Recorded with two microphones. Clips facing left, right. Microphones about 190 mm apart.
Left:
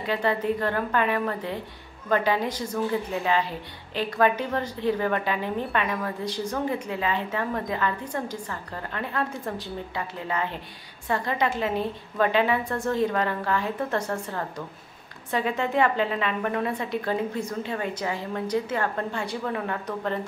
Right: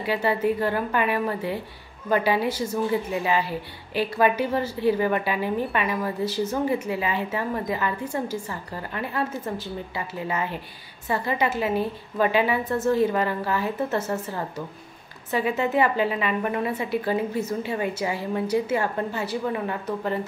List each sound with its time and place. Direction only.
0.0 s a woman's voice: 5° right (ahead or behind)